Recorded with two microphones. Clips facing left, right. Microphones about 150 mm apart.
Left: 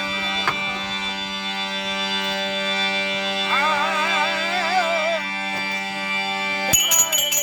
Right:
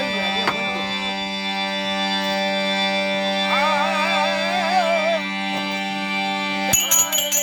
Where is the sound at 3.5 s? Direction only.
30° right (ahead or behind).